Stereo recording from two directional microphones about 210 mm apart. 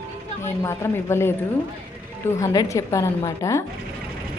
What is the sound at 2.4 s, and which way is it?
A woman's voice, 15° left (ahead or behind).